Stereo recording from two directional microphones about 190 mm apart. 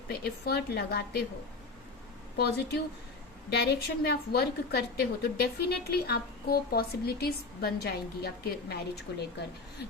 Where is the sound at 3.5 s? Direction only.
55° left (ahead or behind).